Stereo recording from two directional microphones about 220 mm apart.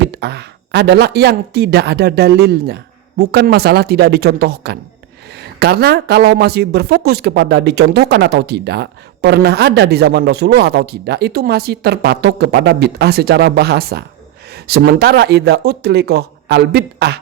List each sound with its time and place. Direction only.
0.0 s speech: 50° right (ahead or behind)